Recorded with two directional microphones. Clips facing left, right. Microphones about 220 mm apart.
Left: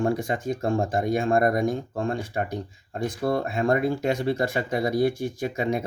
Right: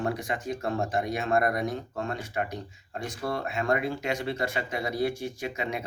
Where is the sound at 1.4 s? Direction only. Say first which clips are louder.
Left 6 dB; 45° left (ahead or behind).